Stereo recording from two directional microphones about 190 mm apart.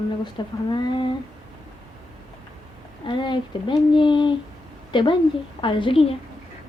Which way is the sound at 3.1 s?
25° left (ahead or behind).